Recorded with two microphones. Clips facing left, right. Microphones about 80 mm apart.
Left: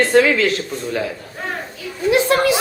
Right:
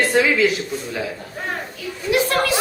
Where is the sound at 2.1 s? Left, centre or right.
Left.